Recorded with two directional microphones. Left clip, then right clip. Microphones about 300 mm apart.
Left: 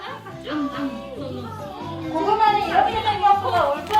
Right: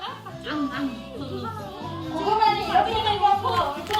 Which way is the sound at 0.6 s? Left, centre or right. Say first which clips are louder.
Left 2 dB; centre.